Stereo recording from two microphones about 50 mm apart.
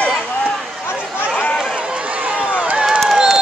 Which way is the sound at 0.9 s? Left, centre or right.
Right.